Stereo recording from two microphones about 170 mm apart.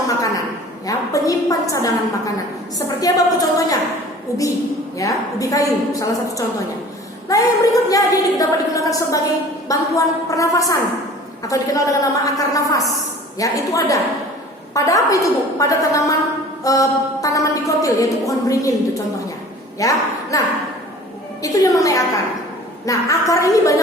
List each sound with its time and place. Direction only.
0.9 s a sound: 20° left (ahead or behind)
2.7 s a woman's voice: 20° left (ahead or behind)
19.8 s a woman's voice: 20° left (ahead or behind)